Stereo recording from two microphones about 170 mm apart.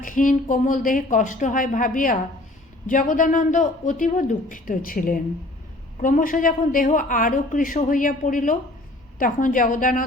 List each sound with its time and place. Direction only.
0.0 s a woman's voice: 50° left (ahead or behind)